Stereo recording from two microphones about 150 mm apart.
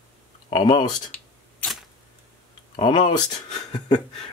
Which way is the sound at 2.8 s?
30° left (ahead or behind).